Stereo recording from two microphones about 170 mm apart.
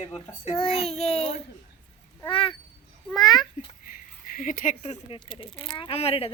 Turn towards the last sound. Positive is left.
turn(degrees=35)  # may be behind; listen again after turning